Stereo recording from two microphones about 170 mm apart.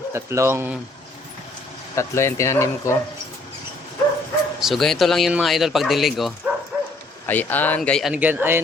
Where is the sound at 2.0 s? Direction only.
15° left (ahead or behind).